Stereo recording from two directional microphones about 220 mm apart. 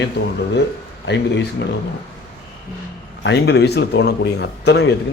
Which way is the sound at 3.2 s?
50° left (ahead or behind).